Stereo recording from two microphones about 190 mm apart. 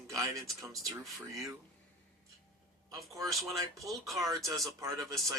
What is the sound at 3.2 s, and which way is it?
Speech, centre (ahead or behind).